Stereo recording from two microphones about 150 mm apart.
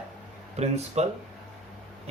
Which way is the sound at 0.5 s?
45° right (ahead or behind).